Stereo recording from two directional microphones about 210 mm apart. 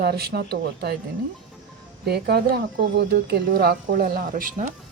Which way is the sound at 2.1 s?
50° right (ahead or behind).